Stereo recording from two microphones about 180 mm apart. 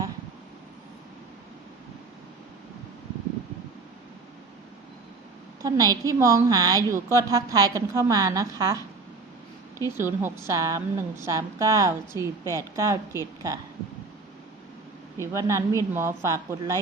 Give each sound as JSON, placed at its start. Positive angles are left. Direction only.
{"t": 5.6, "sound": "a woman's voice", "side_deg": -20}
{"t": 9.8, "sound": "a woman's voice", "side_deg": -15}
{"t": 15.2, "sound": "a woman's voice", "side_deg": -15}